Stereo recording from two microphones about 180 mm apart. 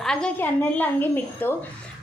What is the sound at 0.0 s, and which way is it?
A woman's voice, 5° left (ahead or behind).